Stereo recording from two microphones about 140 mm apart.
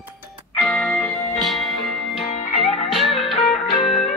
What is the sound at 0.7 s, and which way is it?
Music, 10° left (ahead or behind).